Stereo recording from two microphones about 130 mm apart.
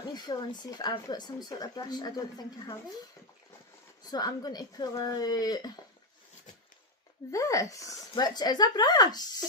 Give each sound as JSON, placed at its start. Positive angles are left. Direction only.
{"t": 0.1, "sound": "speech", "side_deg": 35}
{"t": 4.1, "sound": "speech", "side_deg": 30}
{"t": 7.3, "sound": "speech", "side_deg": 25}